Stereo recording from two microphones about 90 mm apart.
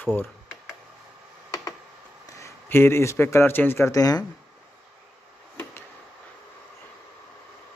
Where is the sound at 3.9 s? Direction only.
45° left (ahead or behind).